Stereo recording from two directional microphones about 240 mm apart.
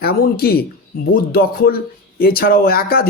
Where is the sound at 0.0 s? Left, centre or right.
Left.